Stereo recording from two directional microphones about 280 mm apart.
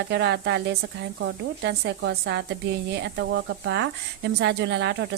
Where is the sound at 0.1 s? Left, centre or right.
Right.